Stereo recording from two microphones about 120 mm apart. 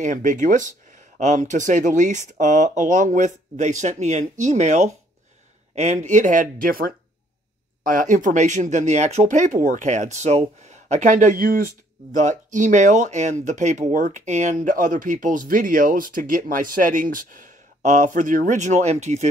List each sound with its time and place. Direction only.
0.0 s speech: 90° right
8.0 s speech: 90° right; by 19.2 s 70° right (ahead or behind)